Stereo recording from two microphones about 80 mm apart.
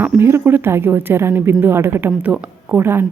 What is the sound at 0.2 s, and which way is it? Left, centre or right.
Speech, right.